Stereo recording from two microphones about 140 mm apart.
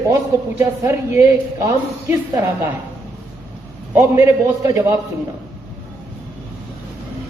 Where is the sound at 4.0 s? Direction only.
20° right (ahead or behind).